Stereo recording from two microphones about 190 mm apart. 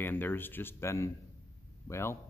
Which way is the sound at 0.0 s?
10° left (ahead or behind).